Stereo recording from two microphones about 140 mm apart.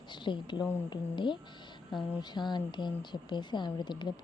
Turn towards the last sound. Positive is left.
turn(degrees=35)  # may be behind; listen again after turning